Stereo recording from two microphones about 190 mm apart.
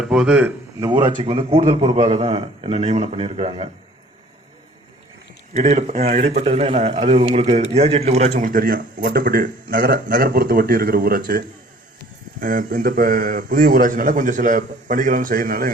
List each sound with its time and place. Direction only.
0.0 s speech: 5° right (ahead or behind)
0.8 s a man's voice: 20° right (ahead or behind)
5.5 s a man's voice: 35° right (ahead or behind)